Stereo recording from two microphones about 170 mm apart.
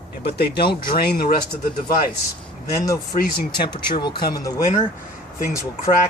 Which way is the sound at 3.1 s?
60° left (ahead or behind).